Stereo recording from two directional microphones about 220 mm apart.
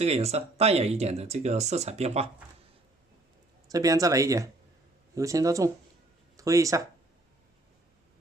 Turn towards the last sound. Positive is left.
turn(degrees=-15)  # may be behind; listen again after turning